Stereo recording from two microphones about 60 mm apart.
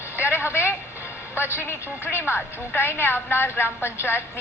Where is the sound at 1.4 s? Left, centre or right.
Left.